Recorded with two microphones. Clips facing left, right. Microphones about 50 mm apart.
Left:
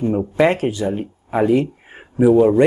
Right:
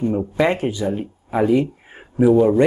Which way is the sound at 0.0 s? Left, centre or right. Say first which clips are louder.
Left 3 dB; centre.